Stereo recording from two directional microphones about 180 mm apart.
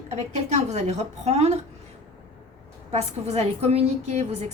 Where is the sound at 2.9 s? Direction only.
35° right (ahead or behind).